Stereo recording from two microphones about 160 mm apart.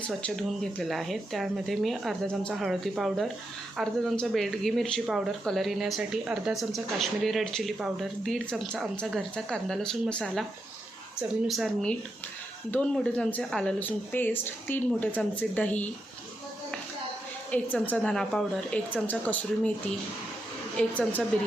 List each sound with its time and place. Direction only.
0.1 s speech: 5° left (ahead or behind)
17.5 s speech: 10° left (ahead or behind)
20.7 s speech: 5° left (ahead or behind)